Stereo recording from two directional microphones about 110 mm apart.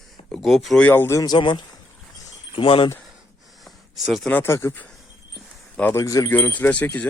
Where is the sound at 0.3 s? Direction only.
Centre (ahead or behind).